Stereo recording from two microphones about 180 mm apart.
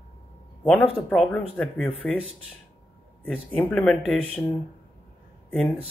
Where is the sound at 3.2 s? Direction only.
5° left (ahead or behind).